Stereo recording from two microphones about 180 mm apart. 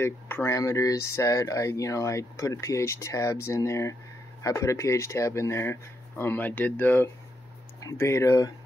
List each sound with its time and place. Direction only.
0.0 s speech: 15° left (ahead or behind)